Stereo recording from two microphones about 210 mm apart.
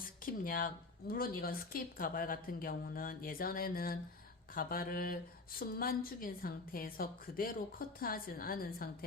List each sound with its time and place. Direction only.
0.2 s speech: 40° left (ahead or behind)